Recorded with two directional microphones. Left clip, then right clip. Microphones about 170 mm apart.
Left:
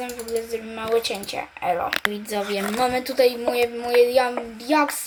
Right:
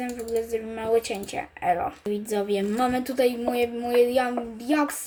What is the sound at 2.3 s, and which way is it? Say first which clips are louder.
A woman's voice: left 1 dB; 35° right (ahead or behind).